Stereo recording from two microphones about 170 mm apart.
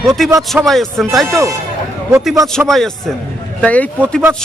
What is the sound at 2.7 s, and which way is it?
Speech, centre (ahead or behind).